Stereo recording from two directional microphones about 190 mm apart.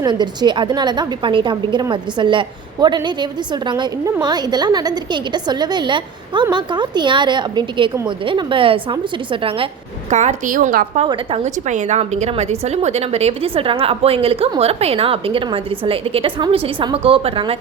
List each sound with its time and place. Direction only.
0.0 s a woman's voice: 20° right (ahead or behind)
10.1 s a woman's voice: 40° right (ahead or behind)
11.0 s a woman's voice: 30° right (ahead or behind)